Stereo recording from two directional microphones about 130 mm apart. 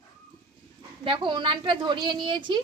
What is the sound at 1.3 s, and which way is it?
A woman's voice, 40° right (ahead or behind).